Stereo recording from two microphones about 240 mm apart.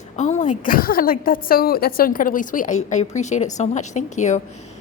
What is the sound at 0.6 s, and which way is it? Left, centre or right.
A woman's voice, left.